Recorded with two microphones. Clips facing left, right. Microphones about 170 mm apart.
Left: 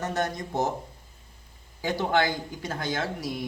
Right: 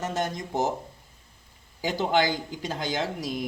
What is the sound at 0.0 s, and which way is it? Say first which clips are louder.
Speech: even; 20° right (ahead or behind).